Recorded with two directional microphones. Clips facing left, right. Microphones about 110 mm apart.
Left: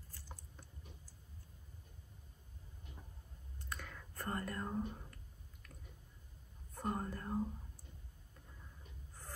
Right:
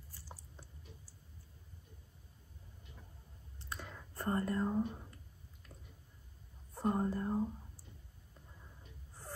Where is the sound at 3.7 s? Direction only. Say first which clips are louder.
Right 2 dB; 15° right (ahead or behind).